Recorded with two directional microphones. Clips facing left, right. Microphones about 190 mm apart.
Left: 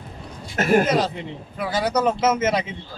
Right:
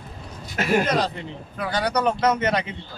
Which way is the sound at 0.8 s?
Centre (ahead or behind).